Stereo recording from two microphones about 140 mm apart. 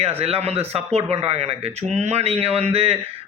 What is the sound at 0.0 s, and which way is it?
Speech, 45° right (ahead or behind).